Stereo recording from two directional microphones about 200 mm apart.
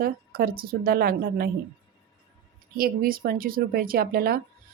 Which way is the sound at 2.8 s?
45° right (ahead or behind).